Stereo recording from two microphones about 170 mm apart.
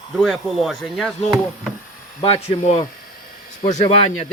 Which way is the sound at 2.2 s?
35° left (ahead or behind).